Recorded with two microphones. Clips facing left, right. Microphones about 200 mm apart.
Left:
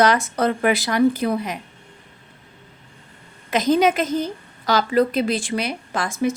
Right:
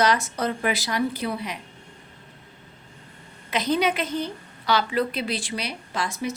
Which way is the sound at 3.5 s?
45° left (ahead or behind).